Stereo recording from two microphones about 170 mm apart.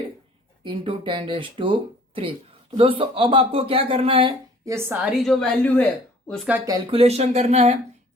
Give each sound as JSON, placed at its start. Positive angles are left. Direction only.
{"t": 0.6, "sound": "speech", "side_deg": -30}
{"t": 4.6, "sound": "a woman's voice", "side_deg": -15}
{"t": 6.9, "sound": "speech", "side_deg": -35}